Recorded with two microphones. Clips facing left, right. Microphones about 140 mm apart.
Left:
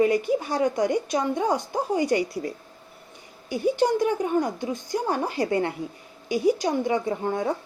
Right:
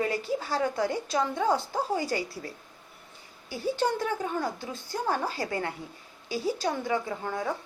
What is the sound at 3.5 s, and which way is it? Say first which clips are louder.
A woman's voice: left 6 dB; 15° left (ahead or behind).